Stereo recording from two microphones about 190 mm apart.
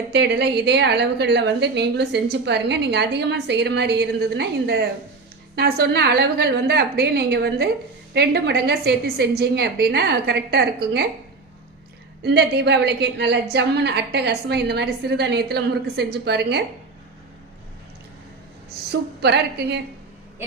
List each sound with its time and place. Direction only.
0.1 s a woman's voice: 65° right (ahead or behind)
12.2 s a woman's voice: 60° right (ahead or behind)
18.9 s a woman's voice: 60° right (ahead or behind)